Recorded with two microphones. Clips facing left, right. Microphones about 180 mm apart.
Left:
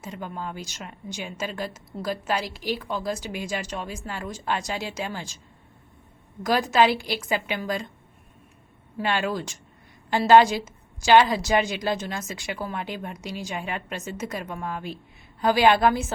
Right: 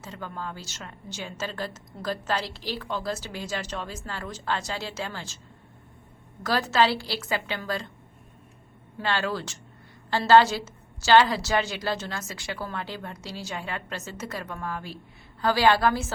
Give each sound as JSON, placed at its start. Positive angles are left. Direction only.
{"t": 0.0, "sound": "a woman's voice", "side_deg": 15}
{"t": 6.4, "sound": "a woman's voice", "side_deg": 15}
{"t": 9.0, "sound": "a woman's voice", "side_deg": 15}